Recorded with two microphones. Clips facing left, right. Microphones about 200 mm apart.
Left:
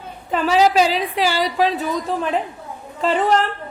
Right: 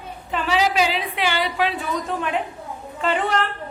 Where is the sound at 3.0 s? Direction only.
35° left (ahead or behind).